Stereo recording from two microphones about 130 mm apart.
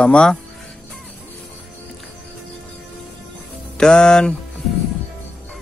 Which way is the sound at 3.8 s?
5° left (ahead or behind).